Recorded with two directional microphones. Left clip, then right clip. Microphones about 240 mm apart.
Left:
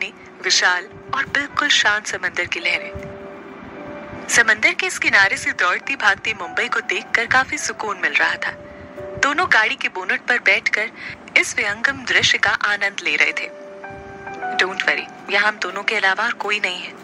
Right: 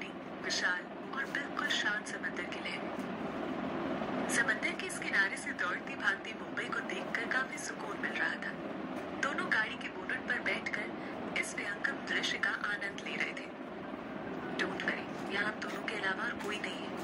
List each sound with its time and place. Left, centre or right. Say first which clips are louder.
0.0 s a man's voice: left 15 dB; left
4.3 s speech: left 19 dB; left
14.6 s speech: left 17 dB; left